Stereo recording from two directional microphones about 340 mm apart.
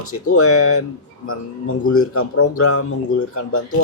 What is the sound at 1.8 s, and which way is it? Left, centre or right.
Speech, left.